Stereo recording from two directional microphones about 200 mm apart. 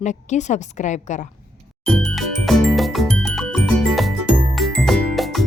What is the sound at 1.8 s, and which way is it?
Music, centre (ahead or behind).